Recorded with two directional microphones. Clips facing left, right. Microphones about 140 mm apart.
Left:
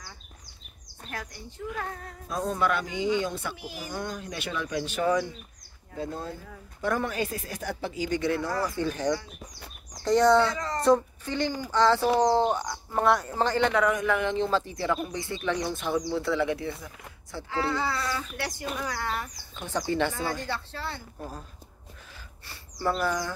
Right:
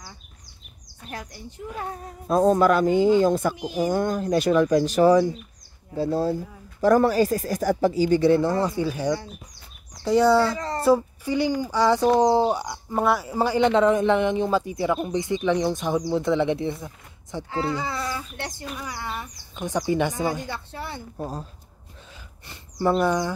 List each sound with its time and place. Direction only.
2.2 s speech: 40° right (ahead or behind); by 8.7 s 25° right (ahead or behind)
8.7 s speech: 10° right (ahead or behind)
10.4 s speech: 30° right (ahead or behind)
10.8 s speech: 5° right (ahead or behind)
21.2 s speech: 30° right (ahead or behind)
22.5 s speech: 20° right (ahead or behind)